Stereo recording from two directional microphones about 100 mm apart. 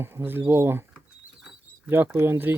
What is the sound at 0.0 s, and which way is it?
Speech, 25° right (ahead or behind).